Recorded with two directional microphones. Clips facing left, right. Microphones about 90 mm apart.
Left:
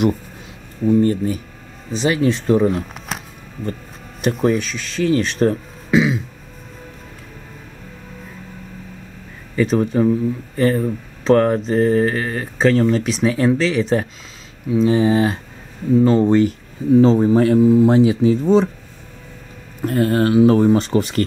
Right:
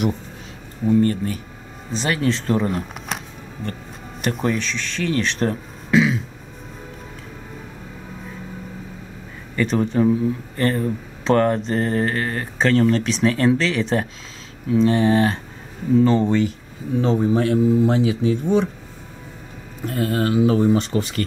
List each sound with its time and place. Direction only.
1.0 s speech: 15° left (ahead or behind)
1.9 s speech: 5° left (ahead or behind)
4.3 s mantra: centre (ahead or behind)
9.6 s mantra: 5° left (ahead or behind)
16.0 s speech: 15° left (ahead or behind)
16.3 s speech: 40° left (ahead or behind)
19.9 s speech: 45° left (ahead or behind)